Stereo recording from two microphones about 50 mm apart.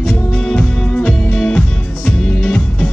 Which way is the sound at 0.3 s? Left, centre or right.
Left.